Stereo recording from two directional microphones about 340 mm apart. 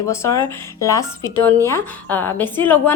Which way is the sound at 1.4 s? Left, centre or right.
Centre.